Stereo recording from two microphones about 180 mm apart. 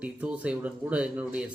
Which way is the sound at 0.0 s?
5° right (ahead or behind).